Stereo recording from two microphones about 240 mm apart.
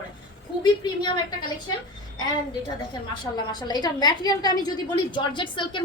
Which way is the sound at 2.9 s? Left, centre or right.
Centre.